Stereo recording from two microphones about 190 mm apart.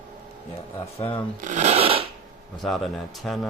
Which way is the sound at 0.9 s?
30° left (ahead or behind).